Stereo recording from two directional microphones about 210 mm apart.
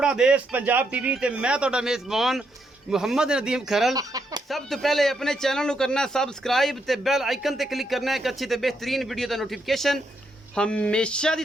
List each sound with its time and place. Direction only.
0.0 s speech: 5° right (ahead or behind)
3.9 s chicken: 15° right (ahead or behind)
4.4 s speech: centre (ahead or behind)